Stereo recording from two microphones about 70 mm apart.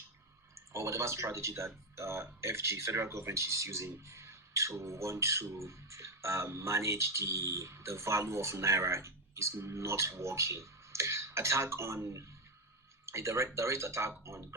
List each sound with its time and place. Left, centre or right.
0.5 s speech: right